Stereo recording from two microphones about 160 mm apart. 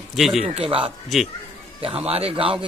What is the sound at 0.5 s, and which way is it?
Speech, 35° right (ahead or behind).